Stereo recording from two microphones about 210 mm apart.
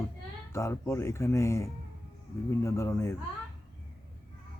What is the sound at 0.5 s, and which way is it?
Speech, 15° left (ahead or behind).